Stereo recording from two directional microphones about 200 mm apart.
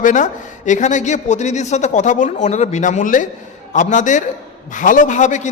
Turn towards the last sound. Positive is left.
turn(degrees=35)  # may be behind; listen again after turning